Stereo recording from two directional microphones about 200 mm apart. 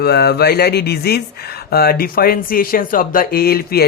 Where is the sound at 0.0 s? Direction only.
50° left (ahead or behind).